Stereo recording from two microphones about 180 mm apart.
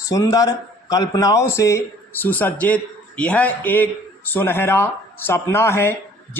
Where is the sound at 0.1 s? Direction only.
20° left (ahead or behind).